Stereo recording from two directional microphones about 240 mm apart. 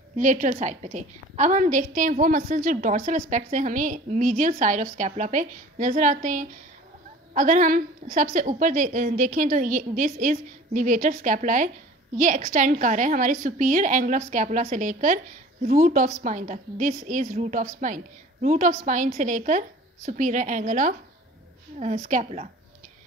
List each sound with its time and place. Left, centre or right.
0.2 s a woman's voice: right